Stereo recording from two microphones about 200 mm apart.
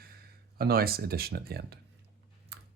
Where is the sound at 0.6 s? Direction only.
50° right (ahead or behind).